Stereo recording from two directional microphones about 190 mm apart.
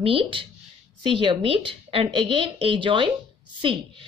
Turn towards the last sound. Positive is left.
turn(degrees=-25)  # may be behind; listen again after turning